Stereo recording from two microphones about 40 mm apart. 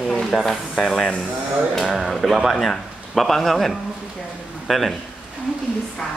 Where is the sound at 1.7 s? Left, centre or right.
Centre.